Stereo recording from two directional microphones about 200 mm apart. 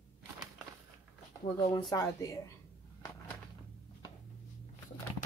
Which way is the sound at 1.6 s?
20° left (ahead or behind).